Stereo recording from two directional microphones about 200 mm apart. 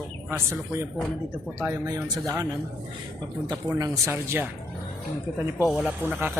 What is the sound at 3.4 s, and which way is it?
Speech, 15° right (ahead or behind).